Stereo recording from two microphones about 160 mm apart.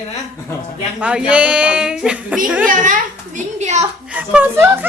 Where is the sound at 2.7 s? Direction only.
55° right (ahead or behind).